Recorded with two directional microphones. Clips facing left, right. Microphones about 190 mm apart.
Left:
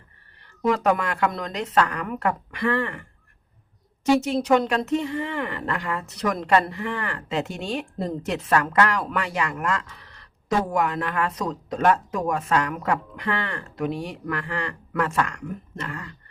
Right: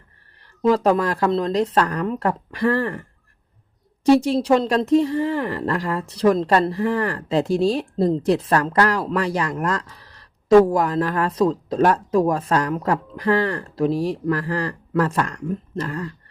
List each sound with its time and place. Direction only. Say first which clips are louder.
0.7 s speech: right 4 dB; 30° right (ahead or behind)
4.0 s speech: right 5 dB; 35° right (ahead or behind)